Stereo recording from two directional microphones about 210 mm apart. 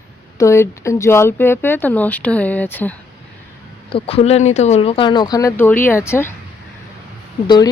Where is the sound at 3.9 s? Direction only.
25° left (ahead or behind).